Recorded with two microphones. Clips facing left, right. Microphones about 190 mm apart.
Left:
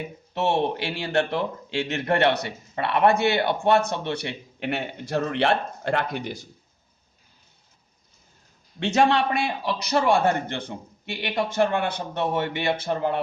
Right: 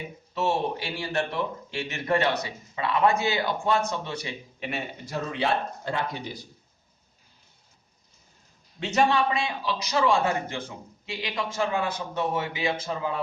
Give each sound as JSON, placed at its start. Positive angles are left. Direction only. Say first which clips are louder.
{"t": 0.3, "sound": "a man's voice", "louder": "left 3 dB", "side_deg": 70}
{"t": 8.8, "sound": "a man's voice", "louder": "left 3 dB", "side_deg": 70}